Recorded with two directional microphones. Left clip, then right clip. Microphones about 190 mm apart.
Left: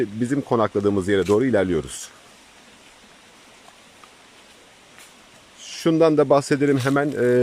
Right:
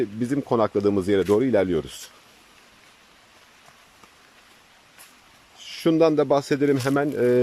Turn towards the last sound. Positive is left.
turn(degrees=0)  # may be behind; listen again after turning